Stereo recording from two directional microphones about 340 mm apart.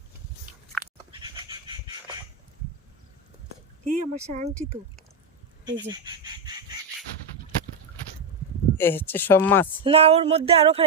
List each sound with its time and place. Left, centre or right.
1.2 s a sound: centre
3.8 s speech: right
5.6 s fowl: centre
8.8 s speech: centre
9.8 s speech: centre